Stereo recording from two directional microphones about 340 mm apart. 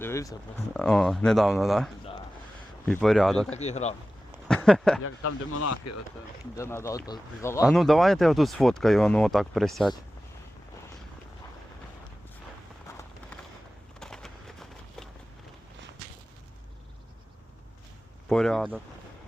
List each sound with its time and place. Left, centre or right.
0.0 s speech: centre
3.5 s speech: centre
4.4 s a sound: centre
5.0 s speech: left
6.6 s speech: centre
14.0 s a sound: centre
18.3 s speech: centre